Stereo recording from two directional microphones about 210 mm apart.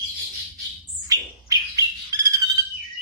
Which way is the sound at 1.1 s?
15° right (ahead or behind).